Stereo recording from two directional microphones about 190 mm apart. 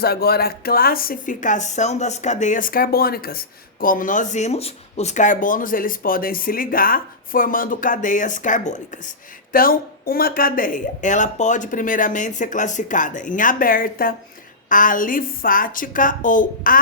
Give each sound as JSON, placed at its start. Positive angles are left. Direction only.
{"t": 0.0, "sound": "speech", "side_deg": 55}